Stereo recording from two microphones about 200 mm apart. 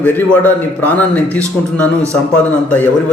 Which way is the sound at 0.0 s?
10° left (ahead or behind).